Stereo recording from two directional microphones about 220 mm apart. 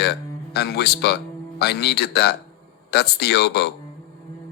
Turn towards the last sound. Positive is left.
turn(degrees=45)  # may be behind; listen again after turning